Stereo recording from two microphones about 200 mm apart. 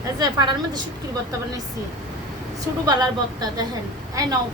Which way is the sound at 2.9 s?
20° right (ahead or behind).